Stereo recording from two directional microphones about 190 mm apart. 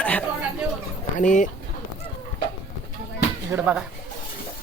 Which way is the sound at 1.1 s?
40° left (ahead or behind).